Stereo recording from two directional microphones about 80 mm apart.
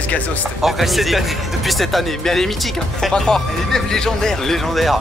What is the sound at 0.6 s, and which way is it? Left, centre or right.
Speech, centre.